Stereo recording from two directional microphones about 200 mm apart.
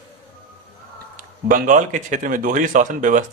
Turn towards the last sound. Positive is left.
turn(degrees=-40)  # may be behind; listen again after turning